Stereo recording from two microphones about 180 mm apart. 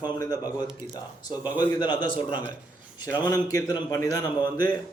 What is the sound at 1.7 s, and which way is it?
Speech, 25° left (ahead or behind).